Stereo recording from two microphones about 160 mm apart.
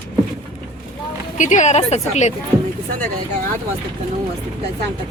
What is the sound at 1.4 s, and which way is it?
Speech, 50° left (ahead or behind).